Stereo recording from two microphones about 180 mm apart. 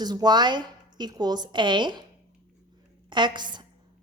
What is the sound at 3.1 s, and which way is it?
Speech, 25° right (ahead or behind).